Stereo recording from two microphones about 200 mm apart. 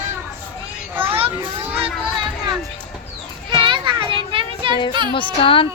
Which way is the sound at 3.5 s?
25° right (ahead or behind).